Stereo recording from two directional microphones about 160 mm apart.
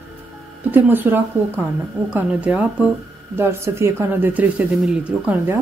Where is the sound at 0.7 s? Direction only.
10° right (ahead or behind).